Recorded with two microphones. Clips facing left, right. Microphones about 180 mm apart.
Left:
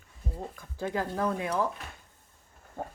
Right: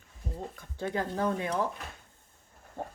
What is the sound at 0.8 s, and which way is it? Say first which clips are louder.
Speech: even; 25° right (ahead or behind).